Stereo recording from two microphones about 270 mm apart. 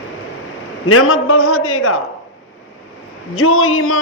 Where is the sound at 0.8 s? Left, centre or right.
Left.